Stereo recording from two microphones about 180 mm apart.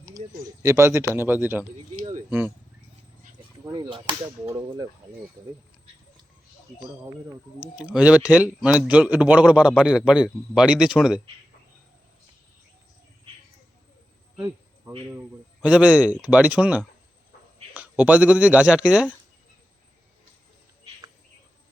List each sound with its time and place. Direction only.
0.6 s speech: 15° right (ahead or behind)
2.0 s a sound: 40° right (ahead or behind)
3.6 s speech: 20° right (ahead or behind)
7.6 s speech: 5° right (ahead or behind)
14.3 s a sound: 10° right (ahead or behind)
15.6 s speech: 5° right (ahead or behind)